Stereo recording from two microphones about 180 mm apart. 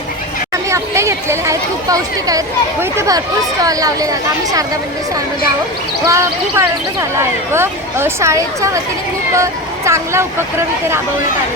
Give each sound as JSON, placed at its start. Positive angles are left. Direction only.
{"t": 0.7, "sound": "speech", "side_deg": -15}
{"t": 6.1, "sound": "speech", "side_deg": -15}